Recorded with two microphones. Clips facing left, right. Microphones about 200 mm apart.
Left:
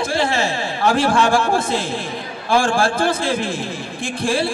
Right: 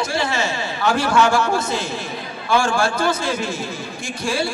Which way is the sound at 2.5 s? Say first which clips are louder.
Left 2 dB; 30° left (ahead or behind).